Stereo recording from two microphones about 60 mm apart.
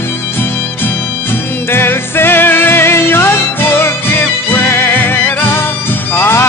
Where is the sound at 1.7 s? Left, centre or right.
Left.